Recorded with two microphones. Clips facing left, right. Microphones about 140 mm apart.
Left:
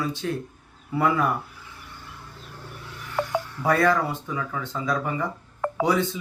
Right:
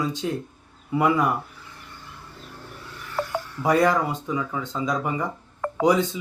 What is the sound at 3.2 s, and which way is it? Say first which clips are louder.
Music: left 2 dB; 10° left (ahead or behind).